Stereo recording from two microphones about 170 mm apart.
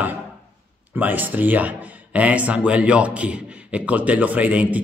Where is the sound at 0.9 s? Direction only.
10° right (ahead or behind).